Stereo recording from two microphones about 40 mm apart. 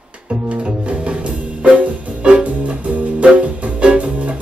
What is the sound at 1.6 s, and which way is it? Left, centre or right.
Music, right.